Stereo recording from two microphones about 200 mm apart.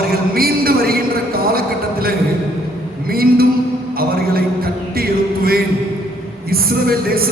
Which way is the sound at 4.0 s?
50° right (ahead or behind).